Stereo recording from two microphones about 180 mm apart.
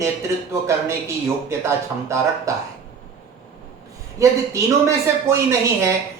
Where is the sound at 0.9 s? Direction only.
15° right (ahead or behind).